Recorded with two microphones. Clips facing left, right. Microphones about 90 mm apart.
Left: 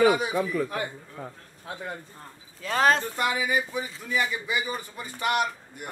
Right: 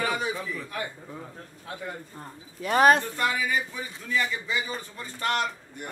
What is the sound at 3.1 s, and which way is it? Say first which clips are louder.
A man's voice: left 1 dB; 15° left (ahead or behind).